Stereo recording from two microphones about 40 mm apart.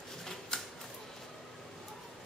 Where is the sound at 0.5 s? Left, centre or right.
Centre.